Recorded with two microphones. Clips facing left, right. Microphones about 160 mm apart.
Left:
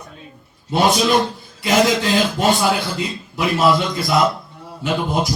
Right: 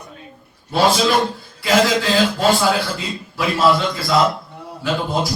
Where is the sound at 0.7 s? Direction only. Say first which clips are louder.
Even; 20° left (ahead or behind).